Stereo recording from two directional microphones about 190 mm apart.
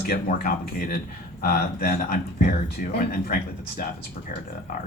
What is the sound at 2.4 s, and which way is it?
Speech, 45° left (ahead or behind).